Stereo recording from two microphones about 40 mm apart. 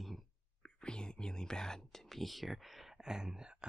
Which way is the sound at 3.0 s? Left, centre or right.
Centre.